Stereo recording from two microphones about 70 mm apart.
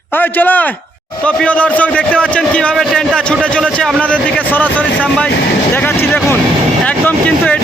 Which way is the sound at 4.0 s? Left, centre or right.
Centre.